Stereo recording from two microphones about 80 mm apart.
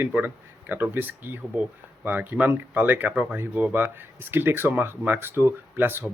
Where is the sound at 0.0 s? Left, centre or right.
Right.